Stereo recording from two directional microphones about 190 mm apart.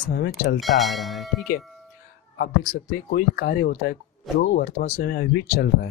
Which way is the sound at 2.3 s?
50° left (ahead or behind).